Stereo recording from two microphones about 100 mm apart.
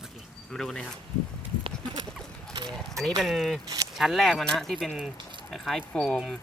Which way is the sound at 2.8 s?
5° left (ahead or behind).